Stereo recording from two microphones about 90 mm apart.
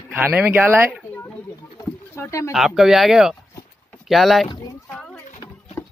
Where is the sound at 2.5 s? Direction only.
5° right (ahead or behind).